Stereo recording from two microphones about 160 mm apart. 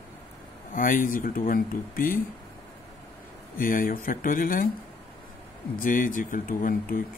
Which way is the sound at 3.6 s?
60° left (ahead or behind).